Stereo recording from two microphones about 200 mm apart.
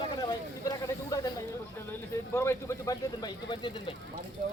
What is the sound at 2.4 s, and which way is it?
Speech, 15° left (ahead or behind).